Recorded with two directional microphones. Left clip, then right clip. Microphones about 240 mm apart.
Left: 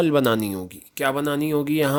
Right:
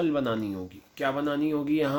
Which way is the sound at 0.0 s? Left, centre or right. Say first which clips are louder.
Left 8 dB; left.